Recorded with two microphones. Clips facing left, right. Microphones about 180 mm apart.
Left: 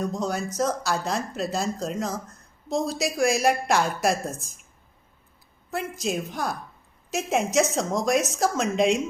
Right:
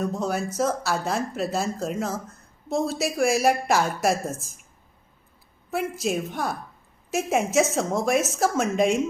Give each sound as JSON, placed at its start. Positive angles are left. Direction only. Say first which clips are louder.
{"t": 0.0, "sound": "speech", "louder": "right 1 dB", "side_deg": -5}
{"t": 5.7, "sound": "speech", "louder": "right 2 dB", "side_deg": -5}